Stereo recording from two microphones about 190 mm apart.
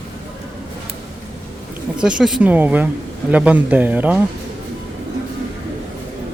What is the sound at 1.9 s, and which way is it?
Speech, 5° right (ahead or behind).